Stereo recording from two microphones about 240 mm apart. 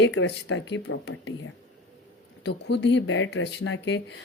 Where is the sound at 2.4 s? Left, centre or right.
Left.